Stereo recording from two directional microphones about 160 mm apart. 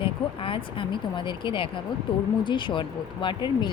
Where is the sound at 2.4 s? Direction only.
30° left (ahead or behind).